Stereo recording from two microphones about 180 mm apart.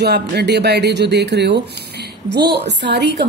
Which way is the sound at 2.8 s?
70° right (ahead or behind).